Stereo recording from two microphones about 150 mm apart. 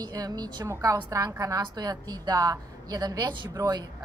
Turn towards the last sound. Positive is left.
turn(degrees=-25)  # may be behind; listen again after turning